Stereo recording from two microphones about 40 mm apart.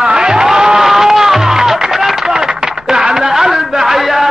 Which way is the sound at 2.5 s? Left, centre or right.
Centre.